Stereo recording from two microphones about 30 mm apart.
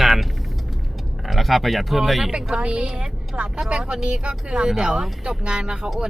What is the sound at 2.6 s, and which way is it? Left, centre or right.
Speech, right.